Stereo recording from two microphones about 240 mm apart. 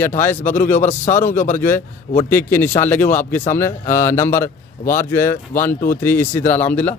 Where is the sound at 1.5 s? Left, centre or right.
Centre.